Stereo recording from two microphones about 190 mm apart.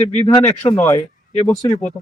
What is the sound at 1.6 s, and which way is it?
Speech, 35° left (ahead or behind).